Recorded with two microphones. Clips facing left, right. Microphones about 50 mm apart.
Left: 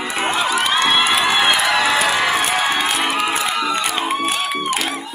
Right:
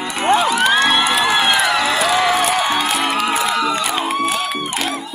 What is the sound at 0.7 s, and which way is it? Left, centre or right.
Crowd, centre.